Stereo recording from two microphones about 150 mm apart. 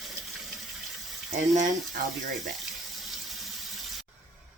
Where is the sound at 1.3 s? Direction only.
55° right (ahead or behind).